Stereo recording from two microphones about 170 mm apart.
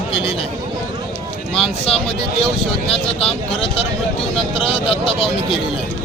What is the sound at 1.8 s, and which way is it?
Speech, 35° left (ahead or behind).